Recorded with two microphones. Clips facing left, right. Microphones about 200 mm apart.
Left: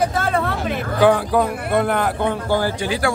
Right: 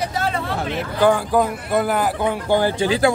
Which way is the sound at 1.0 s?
Centre (ahead or behind).